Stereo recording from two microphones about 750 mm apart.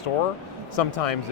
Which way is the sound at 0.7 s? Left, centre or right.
Left.